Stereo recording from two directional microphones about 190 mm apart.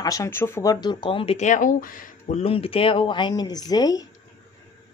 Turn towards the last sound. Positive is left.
turn(degrees=20)  # may be behind; listen again after turning